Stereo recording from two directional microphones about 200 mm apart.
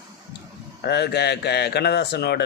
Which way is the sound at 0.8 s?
55° left (ahead or behind).